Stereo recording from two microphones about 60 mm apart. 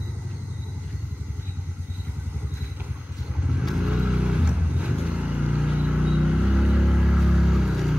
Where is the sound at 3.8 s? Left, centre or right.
Centre.